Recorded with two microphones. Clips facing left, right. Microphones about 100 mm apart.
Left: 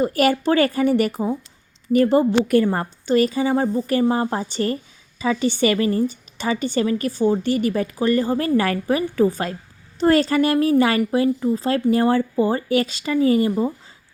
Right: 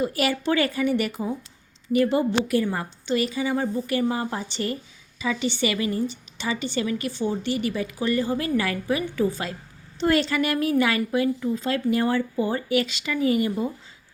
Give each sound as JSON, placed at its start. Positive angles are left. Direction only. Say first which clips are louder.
{"t": 0.0, "sound": "a woman's voice", "louder": "left 6 dB", "side_deg": 45}